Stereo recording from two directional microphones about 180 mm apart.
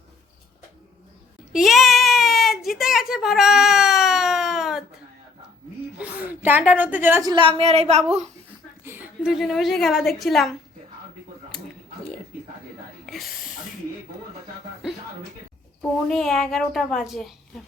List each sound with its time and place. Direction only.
1.5 s a sound: centre (ahead or behind)
6.0 s a sound: 10° right (ahead or behind)
7.3 s a woman's voice: 25° right (ahead or behind)
8.8 s a woman's voice: 10° right (ahead or behind)
13.1 s snake: centre (ahead or behind)
16.0 s a woman's voice: 5° left (ahead or behind)